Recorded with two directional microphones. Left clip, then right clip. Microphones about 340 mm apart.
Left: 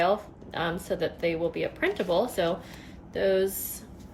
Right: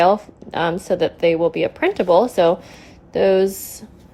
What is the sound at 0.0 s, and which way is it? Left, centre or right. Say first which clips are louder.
A woman's voice: right 10 dB; centre.